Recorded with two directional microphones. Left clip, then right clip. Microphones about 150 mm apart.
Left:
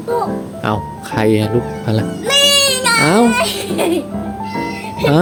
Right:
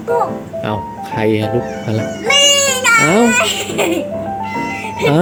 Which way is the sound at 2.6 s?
15° left (ahead or behind).